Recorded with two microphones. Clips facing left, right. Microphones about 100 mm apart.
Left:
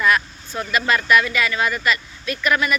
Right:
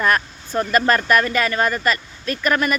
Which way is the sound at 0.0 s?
40° right (ahead or behind).